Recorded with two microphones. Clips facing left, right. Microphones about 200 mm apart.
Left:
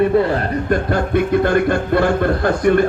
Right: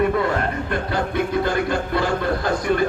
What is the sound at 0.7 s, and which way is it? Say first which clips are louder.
Speech: left 6 dB; 55° left (ahead or behind).